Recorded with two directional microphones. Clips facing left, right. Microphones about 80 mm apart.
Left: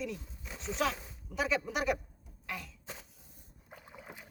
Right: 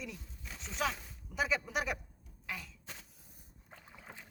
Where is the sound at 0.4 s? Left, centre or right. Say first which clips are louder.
Left 3 dB; centre.